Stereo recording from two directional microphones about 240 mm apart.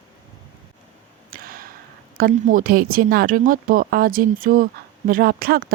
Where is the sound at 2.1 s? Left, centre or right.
Right.